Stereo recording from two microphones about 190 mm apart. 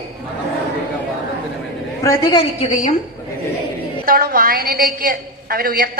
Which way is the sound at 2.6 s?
40° left (ahead or behind).